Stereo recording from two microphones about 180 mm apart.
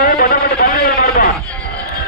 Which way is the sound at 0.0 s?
55° left (ahead or behind).